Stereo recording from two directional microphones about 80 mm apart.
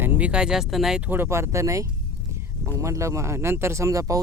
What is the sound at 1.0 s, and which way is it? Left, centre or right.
Speech, right.